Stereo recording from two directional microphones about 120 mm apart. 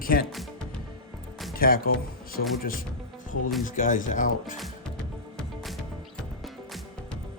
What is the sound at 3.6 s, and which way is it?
Speech, 90° left.